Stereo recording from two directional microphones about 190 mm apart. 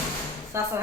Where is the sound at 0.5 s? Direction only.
15° right (ahead or behind).